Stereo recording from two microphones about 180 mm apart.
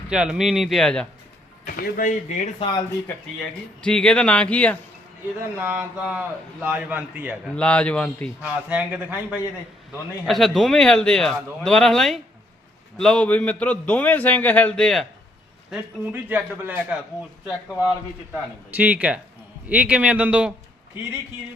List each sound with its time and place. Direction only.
0.1 s speech: 5° right (ahead or behind)
1.6 s speech: 50° left (ahead or behind)
3.8 s speech: 5° left (ahead or behind)
5.4 s a man's voice: 10° right (ahead or behind)
7.4 s a man's voice: 5° left (ahead or behind)
8.4 s a man's voice: 5° right (ahead or behind)
15.7 s a man's voice: 10° right (ahead or behind)